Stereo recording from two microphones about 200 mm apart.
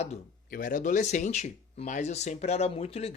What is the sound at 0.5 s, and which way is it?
Speech, 45° left (ahead or behind).